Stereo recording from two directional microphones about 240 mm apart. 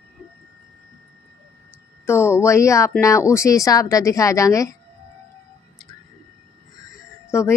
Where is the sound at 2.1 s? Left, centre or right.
Centre.